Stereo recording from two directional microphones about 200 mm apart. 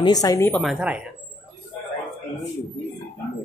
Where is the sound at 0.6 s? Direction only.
5° right (ahead or behind).